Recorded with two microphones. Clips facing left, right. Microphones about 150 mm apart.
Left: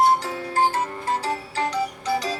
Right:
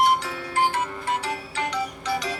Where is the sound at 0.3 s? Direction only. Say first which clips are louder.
Left 2 dB; 30° left (ahead or behind).